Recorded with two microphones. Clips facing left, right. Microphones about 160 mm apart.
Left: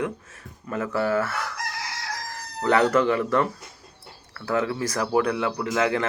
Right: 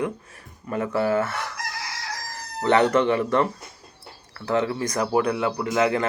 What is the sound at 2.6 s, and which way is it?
A man's voice, 25° right (ahead or behind).